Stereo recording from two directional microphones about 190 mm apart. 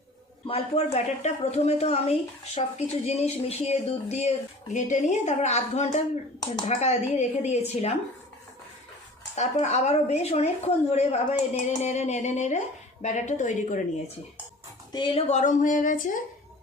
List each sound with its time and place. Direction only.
0.4 s speech: 30° left (ahead or behind)
9.3 s speech: 35° left (ahead or behind)
14.9 s speech: 30° left (ahead or behind); by 16.2 s 45° left (ahead or behind)